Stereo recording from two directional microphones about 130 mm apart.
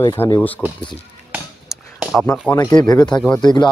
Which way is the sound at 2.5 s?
25° left (ahead or behind).